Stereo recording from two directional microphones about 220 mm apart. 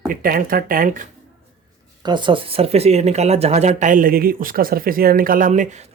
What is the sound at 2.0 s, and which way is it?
Speech, 20° right (ahead or behind).